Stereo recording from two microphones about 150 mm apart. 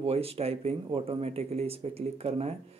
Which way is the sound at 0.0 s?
40° right (ahead or behind).